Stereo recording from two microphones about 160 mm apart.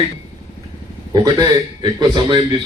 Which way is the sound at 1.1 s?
25° right (ahead or behind).